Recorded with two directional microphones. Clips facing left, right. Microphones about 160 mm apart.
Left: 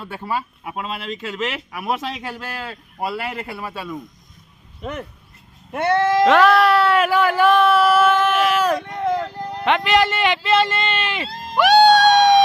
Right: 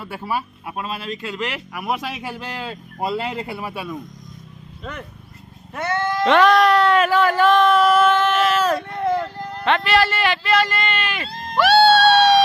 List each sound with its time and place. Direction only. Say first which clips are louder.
0.0 s speech: even; 5° right (ahead or behind)
4.8 s speech: left 4 dB; 15° left (ahead or behind)
5.7 s speech: left 6 dB; 30° left (ahead or behind)
6.2 s speech: right 1 dB; 5° left (ahead or behind)
9.4 s music: left 1 dB; 15° left (ahead or behind)
11.3 s music: even; 5° left (ahead or behind)
11.6 s music: left 1 dB; 15° left (ahead or behind)